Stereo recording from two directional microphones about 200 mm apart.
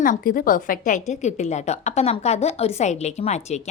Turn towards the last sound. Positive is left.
turn(degrees=35)  # may be behind; listen again after turning